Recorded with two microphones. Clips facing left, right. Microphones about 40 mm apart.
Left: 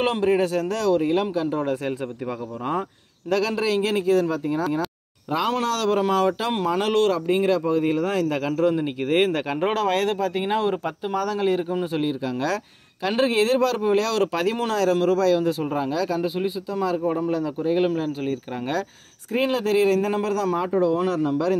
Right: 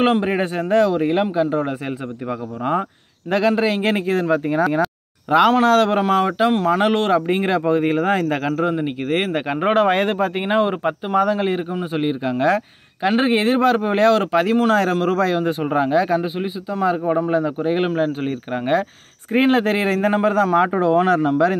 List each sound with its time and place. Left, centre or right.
0.0 s speech: right
3.3 s speech: right
5.3 s speech: right
5.7 s speech: right
7.2 s speech: right; by 9.4 s centre
9.5 s speech: right
12.1 s speech: right
14.1 s speech: centre
14.7 s speech: right